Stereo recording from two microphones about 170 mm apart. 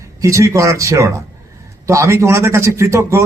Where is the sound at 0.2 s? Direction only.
20° right (ahead or behind).